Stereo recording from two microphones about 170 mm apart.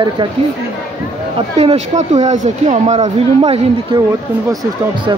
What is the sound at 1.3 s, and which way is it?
Speech, 35° right (ahead or behind).